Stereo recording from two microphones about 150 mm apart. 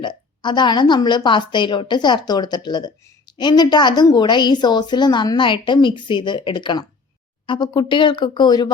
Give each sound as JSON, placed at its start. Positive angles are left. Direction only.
{"t": 0.0, "sound": "a woman's voice", "side_deg": 30}